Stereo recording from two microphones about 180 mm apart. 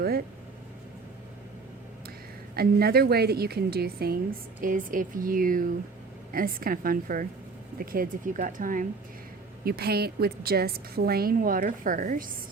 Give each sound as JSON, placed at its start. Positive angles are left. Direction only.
{"t": 2.6, "sound": "a woman's voice", "side_deg": -60}
{"t": 4.6, "sound": "speech", "side_deg": -50}
{"t": 9.6, "sound": "a woman's voice", "side_deg": -60}